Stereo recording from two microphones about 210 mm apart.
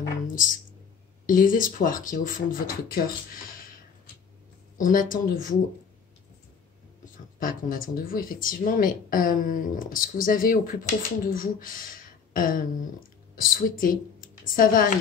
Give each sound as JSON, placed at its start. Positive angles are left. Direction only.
{"t": 1.2, "sound": "speech", "side_deg": 40}
{"t": 4.7, "sound": "speech", "side_deg": 40}
{"t": 7.3, "sound": "a woman's voice", "side_deg": 40}